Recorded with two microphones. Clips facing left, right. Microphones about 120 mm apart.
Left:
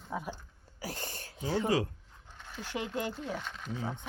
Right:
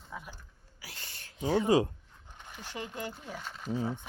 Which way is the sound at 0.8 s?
45° left (ahead or behind).